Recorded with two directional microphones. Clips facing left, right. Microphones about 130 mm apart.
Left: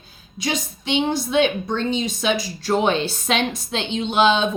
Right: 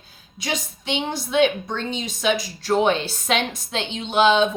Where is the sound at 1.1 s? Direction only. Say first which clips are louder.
Right 2 dB; 25° left (ahead or behind).